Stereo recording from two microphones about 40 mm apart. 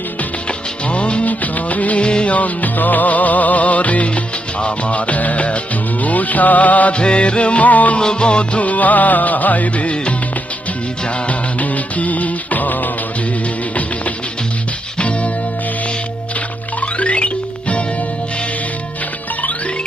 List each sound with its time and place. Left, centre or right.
0.9 s music: left
1.3 s music of bollywood: left
2.0 s music of bollywood: left
2.3 s music: left
6.9 s music: left
7.9 s music: left
8.6 s music: left
11.3 s music: left
14.9 s music: left
16.8 s music: left